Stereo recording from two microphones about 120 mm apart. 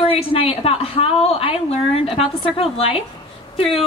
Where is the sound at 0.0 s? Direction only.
55° left (ahead or behind).